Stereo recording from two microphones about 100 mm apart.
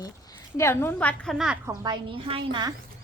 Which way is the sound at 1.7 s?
45° right (ahead or behind).